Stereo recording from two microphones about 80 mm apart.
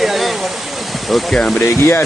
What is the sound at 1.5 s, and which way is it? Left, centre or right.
Speech, left.